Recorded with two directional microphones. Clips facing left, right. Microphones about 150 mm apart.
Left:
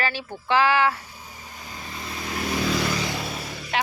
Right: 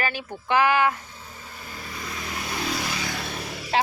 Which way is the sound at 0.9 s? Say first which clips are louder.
Even; 10° left (ahead or behind).